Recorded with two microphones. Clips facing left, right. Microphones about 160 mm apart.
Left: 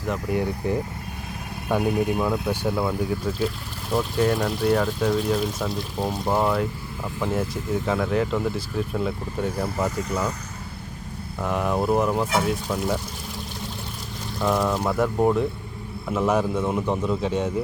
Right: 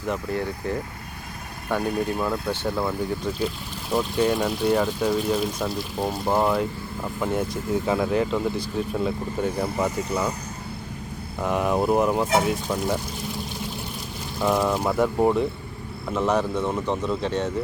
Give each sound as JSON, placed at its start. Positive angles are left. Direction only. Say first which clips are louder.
{"t": 0.3, "sound": "speech", "louder": "left 3 dB", "side_deg": 15}
{"t": 11.4, "sound": "speech", "louder": "right 1 dB", "side_deg": 0}
{"t": 14.3, "sound": "speech", "louder": "right 1 dB", "side_deg": 0}